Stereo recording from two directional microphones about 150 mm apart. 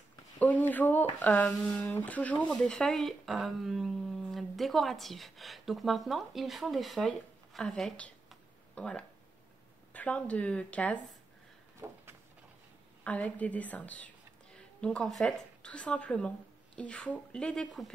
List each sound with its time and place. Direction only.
0.4 s speech: 10° left (ahead or behind)
11.8 s a sound: 15° right (ahead or behind)
13.0 s speech: 10° left (ahead or behind)